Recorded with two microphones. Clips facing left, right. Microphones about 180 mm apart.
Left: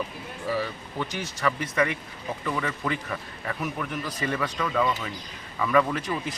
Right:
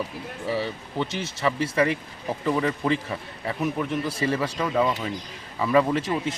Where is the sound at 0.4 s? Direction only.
25° right (ahead or behind).